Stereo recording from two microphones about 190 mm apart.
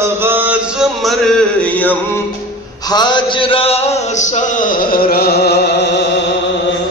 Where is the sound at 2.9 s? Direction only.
25° left (ahead or behind); by 6.0 s 60° left (ahead or behind).